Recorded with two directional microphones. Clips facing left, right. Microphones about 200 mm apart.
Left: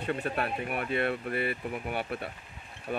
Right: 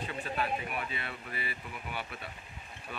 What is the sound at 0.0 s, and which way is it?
Speech, 60° left (ahead or behind).